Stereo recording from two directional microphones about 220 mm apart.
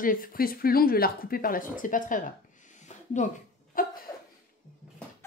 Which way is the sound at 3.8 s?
40° left (ahead or behind).